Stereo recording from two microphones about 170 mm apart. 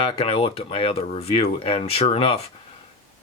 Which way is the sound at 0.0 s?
35° left (ahead or behind).